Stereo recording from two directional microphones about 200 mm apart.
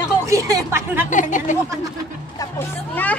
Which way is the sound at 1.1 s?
40° left (ahead or behind).